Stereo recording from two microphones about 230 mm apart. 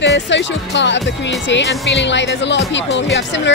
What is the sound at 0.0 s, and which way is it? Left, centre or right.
Speech, left.